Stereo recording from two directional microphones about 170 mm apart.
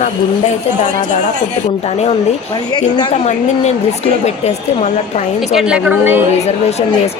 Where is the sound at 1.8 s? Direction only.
40° left (ahead or behind).